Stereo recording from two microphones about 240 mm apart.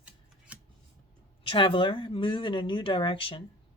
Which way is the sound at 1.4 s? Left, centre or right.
Left.